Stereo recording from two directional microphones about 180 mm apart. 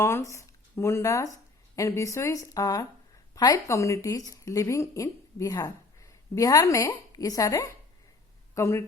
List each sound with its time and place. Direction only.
0.0 s speech: 15° left (ahead or behind)